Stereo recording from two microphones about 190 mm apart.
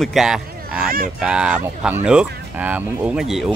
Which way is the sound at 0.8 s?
50° right (ahead or behind).